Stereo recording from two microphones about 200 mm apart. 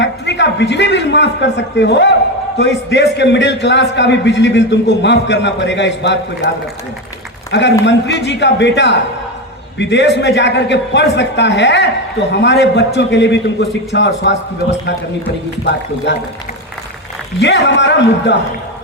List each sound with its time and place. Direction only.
0.0 s a man's voice: 60° left (ahead or behind)
7.5 s a man's voice: 60° left (ahead or behind)
17.4 s a man's voice: 60° left (ahead or behind)